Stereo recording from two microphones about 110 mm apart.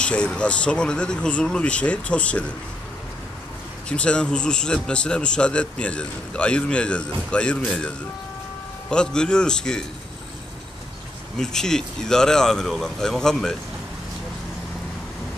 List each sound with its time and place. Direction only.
0.0 s a man's voice: 10° left (ahead or behind)
3.9 s a man's voice: 10° left (ahead or behind)
8.9 s a man's voice: 5° left (ahead or behind)
11.3 s speech: 5° left (ahead or behind)